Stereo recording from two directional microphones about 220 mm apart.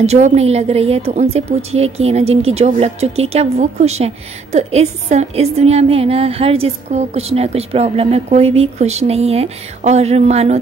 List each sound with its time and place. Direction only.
0.0 s a woman's voice: 30° right (ahead or behind)